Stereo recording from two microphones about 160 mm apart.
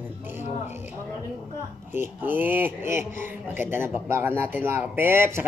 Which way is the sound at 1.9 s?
10° right (ahead or behind).